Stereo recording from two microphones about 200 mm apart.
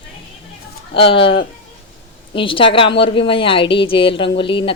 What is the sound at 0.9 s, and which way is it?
A woman's voice, 25° left (ahead or behind).